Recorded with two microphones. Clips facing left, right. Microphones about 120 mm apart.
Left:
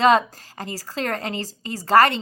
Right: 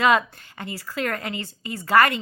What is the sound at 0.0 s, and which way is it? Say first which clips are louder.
A woman's voice: left 3 dB; 30° left (ahead or behind).